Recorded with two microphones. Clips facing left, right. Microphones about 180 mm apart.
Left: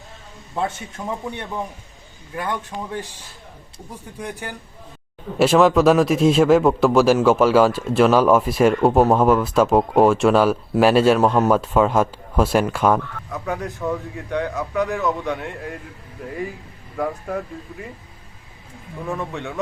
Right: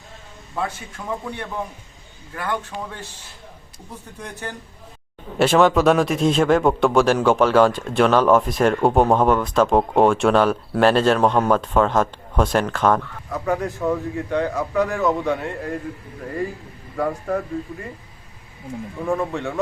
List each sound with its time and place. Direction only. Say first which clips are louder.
0.5 s a man's voice: left 2 dB; 25° left (ahead or behind)
4.2 s speech: left 2 dB; 10° left (ahead or behind)
5.4 s speech: left 1 dB; centre (ahead or behind)
17.0 s speech: right 2 dB; 5° left (ahead or behind)
19.3 s speech: right 3 dB; centre (ahead or behind)